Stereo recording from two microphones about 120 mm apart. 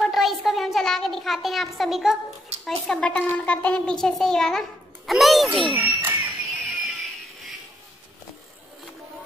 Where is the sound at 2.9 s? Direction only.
10° left (ahead or behind).